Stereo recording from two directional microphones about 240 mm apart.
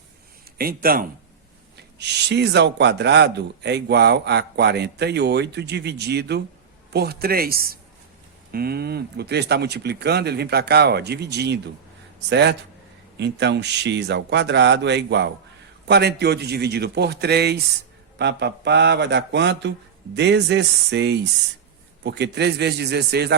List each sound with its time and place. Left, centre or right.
0.6 s speech: right